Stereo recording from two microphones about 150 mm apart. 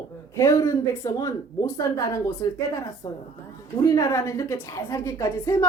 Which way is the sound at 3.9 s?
20° left (ahead or behind).